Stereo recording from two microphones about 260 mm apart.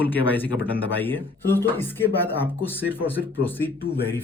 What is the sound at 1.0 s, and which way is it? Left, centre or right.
Speech, centre.